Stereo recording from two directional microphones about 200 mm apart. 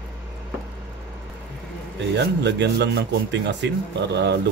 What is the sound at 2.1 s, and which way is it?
Speech, 60° right (ahead or behind).